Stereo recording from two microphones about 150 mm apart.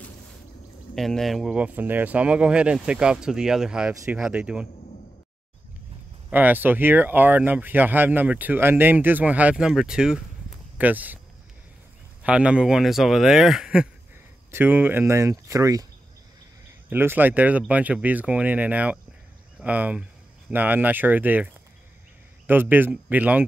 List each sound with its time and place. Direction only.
0.9 s speech: centre (ahead or behind)
6.3 s speech: 10° right (ahead or behind)
12.2 s speech: 10° right (ahead or behind)
16.9 s speech: 15° right (ahead or behind)
22.5 s speech: 15° right (ahead or behind)